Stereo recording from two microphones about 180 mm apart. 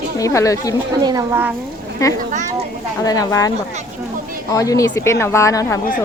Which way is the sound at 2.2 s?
45° right (ahead or behind).